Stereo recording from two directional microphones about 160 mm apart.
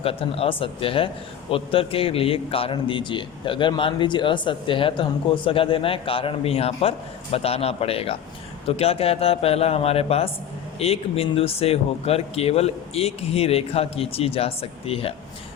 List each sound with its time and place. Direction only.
0.0 s a man's voice: 35° left (ahead or behind)